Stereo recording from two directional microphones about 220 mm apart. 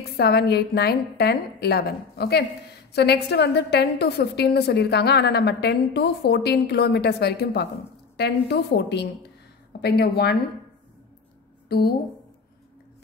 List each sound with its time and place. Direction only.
0.2 s a woman's voice: 45° left (ahead or behind)
11.7 s a woman's voice: 45° left (ahead or behind)